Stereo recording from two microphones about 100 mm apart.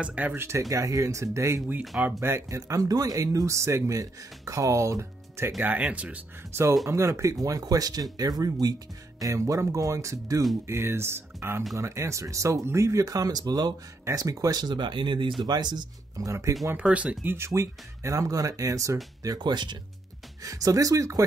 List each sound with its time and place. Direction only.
0.0 s speech: 15° right (ahead or behind)
0.6 s speech: 35° right (ahead or behind)
5.6 s speech: 15° right (ahead or behind)
6.9 s speech: 30° right (ahead or behind)
14.0 s speech: 30° right (ahead or behind); by 15.3 s 55° right (ahead or behind)
15.4 s speech: 45° right (ahead or behind)
16.7 s speech: 15° right (ahead or behind)
17.5 s speech: 30° right (ahead or behind)
19.2 s speech: 45° right (ahead or behind)
20.4 s speech: 35° right (ahead or behind)